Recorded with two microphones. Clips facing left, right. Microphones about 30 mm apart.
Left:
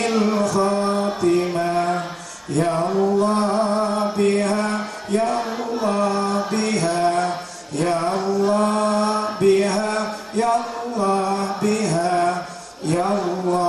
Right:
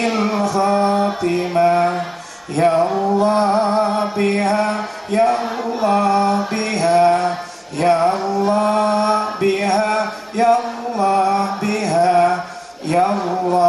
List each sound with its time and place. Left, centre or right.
0.0 s mantra: centre
2.5 s male singing: right
3.2 s mantra: right
12.8 s speech: right